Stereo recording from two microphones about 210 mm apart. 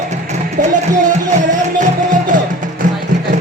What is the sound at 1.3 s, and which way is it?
Music, 40° right (ahead or behind).